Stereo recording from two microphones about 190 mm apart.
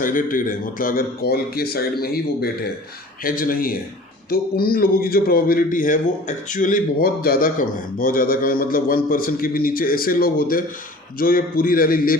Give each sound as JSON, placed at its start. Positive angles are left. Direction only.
{"t": 0.0, "sound": "speech", "side_deg": 45}